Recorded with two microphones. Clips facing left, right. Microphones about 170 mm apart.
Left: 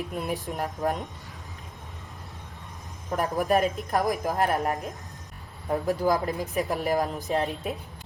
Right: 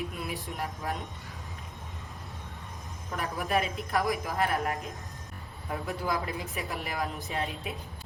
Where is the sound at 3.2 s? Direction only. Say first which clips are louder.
Left 6 dB; 40° left (ahead or behind).